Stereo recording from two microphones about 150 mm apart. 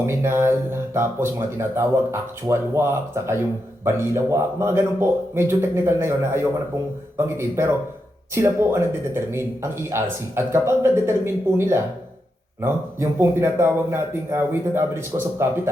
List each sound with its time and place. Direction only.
0.0 s speech: 15° right (ahead or behind)